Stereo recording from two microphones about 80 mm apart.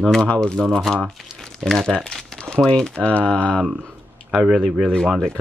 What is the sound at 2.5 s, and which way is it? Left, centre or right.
Speech, centre.